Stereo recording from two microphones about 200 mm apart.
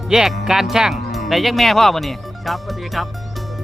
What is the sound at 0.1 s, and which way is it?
Speech, centre (ahead or behind).